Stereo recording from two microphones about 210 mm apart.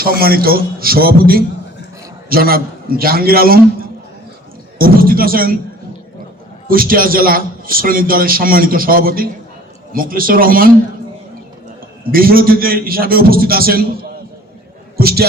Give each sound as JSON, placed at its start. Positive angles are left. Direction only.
{"t": 0.0, "sound": "a man's voice", "side_deg": -45}
{"t": 4.8, "sound": "a man's voice", "side_deg": -45}
{"t": 6.7, "sound": "a man's voice", "side_deg": -45}
{"t": 12.1, "sound": "a man's voice", "side_deg": -45}